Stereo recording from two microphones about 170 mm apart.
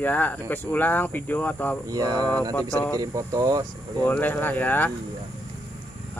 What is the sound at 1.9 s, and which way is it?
Speech, 20° right (ahead or behind).